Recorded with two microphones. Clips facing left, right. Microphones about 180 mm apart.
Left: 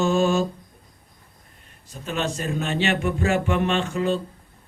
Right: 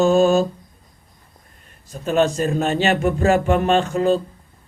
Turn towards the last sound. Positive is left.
turn(degrees=-40)  # may be behind; listen again after turning